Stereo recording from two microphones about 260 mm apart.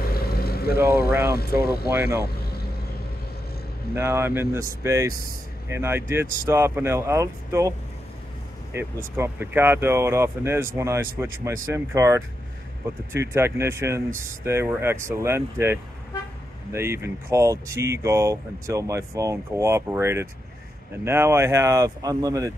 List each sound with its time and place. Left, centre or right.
0.1 s vehicle: left
0.7 s speech: centre
1.3 s speech: left
1.9 s speech: centre
3.9 s speech: centre
8.7 s speech: centre